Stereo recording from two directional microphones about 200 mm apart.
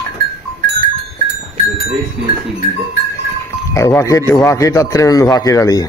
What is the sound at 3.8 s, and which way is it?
Speech, 15° left (ahead or behind).